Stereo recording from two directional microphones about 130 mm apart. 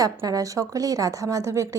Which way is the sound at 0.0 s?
25° right (ahead or behind).